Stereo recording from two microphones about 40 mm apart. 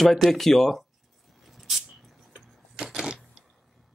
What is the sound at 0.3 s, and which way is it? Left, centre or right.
Speech, centre.